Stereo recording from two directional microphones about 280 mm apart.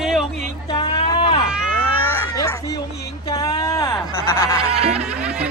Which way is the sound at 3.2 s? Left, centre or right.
Centre.